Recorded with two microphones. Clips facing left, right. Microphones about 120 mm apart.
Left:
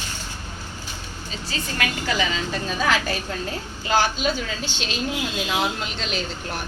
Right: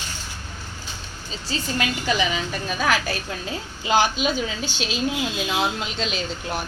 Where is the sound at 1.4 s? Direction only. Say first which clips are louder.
Right 2 dB; 35° right (ahead or behind).